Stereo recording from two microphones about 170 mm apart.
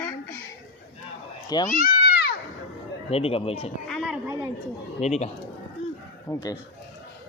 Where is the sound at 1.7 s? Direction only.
55° left (ahead or behind).